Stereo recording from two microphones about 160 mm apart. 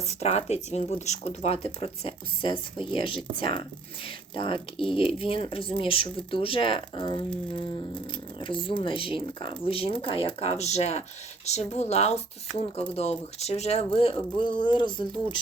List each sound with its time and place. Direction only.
0.1 s speech: 45° left (ahead or behind)
8.1 s speech: 30° left (ahead or behind)